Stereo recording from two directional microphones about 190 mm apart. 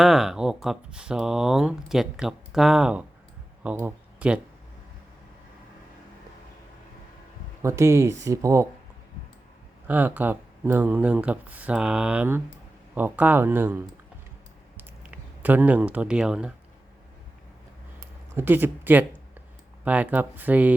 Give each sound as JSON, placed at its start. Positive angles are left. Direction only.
{"t": 0.0, "sound": "speech", "side_deg": 0}
{"t": 7.6, "sound": "speech", "side_deg": -15}
{"t": 9.8, "sound": "speech", "side_deg": -10}
{"t": 14.8, "sound": "a sound", "side_deg": -10}
{"t": 18.0, "sound": "a sound", "side_deg": -10}
{"t": 19.8, "sound": "speech", "side_deg": -10}